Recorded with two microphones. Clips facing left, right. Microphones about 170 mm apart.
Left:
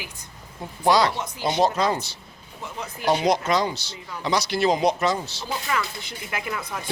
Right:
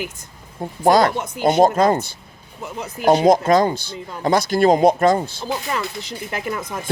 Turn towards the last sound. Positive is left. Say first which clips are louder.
# right 6 dB
turn(degrees=-45)  # may be behind; listen again after turning